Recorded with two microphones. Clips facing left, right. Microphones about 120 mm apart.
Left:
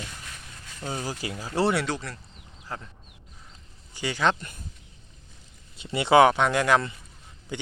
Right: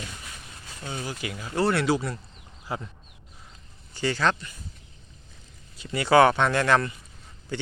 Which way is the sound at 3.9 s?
15° left (ahead or behind).